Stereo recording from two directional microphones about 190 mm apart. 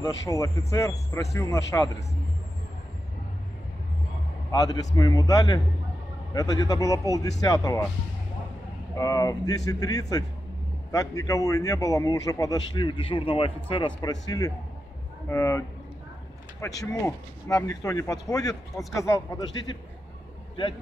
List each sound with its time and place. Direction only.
0.0 s speech: 15° left (ahead or behind)
4.5 s a man's voice: 20° left (ahead or behind)
8.9 s a man's voice: 20° left (ahead or behind)
15.2 s speech: 15° left (ahead or behind)
16.6 s speech: 15° left (ahead or behind)